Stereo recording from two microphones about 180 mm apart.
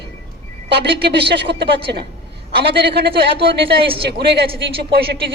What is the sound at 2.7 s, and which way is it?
Speech, 65° right (ahead or behind).